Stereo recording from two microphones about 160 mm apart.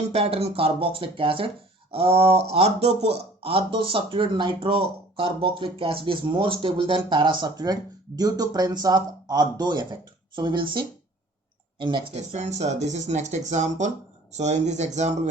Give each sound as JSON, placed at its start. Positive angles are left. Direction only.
{"t": 0.1, "sound": "speech", "side_deg": -40}
{"t": 12.3, "sound": "speech", "side_deg": -45}